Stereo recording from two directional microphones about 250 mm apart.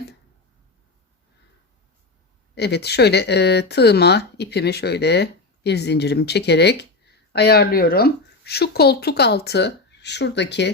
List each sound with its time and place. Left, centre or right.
2.6 s speech: left